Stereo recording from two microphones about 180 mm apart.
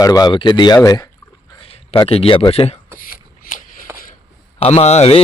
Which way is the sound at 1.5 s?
30° left (ahead or behind).